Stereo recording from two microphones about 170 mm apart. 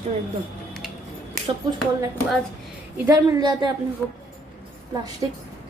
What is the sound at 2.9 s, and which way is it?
Speech, 20° right (ahead or behind).